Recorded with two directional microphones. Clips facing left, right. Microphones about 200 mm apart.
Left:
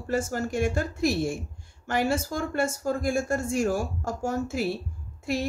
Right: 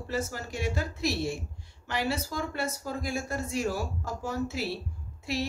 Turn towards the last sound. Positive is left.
turn(degrees=50)  # may be behind; listen again after turning